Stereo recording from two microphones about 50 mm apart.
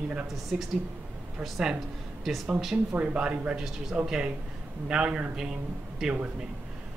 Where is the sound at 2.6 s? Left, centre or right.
Centre.